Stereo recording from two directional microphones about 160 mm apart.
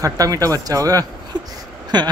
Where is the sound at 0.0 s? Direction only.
20° right (ahead or behind).